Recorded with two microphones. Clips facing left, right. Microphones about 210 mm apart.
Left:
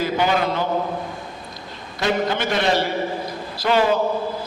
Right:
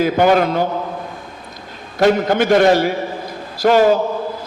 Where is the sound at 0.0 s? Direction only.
50° right (ahead or behind).